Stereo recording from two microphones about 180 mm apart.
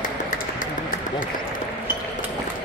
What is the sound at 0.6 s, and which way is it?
Run, 50° left (ahead or behind).